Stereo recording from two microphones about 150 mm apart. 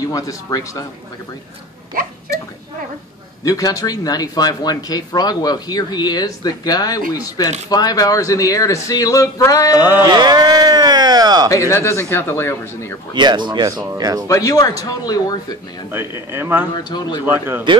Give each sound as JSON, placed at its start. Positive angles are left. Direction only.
{"t": 0.0, "sound": "speech", "side_deg": 25}
{"t": 3.4, "sound": "speech", "side_deg": 20}
{"t": 10.0, "sound": "speech", "side_deg": -30}
{"t": 11.4, "sound": "speech", "side_deg": 20}
{"t": 13.1, "sound": "speech", "side_deg": -30}
{"t": 14.2, "sound": "speech", "side_deg": 20}
{"t": 15.9, "sound": "speech", "side_deg": -15}
{"t": 16.7, "sound": "speech", "side_deg": 30}
{"t": 17.2, "sound": "speech", "side_deg": -15}